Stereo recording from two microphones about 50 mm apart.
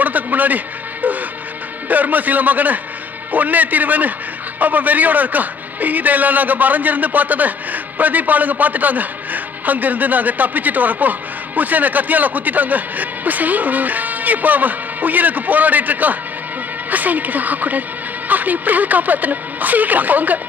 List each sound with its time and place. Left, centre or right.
0.0 s music: right
1.9 s a man's voice: right